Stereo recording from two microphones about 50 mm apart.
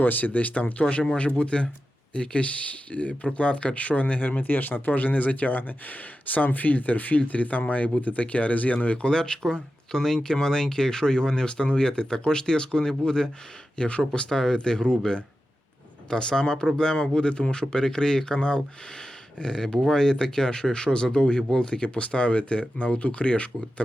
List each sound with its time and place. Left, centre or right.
0.0 s speech: left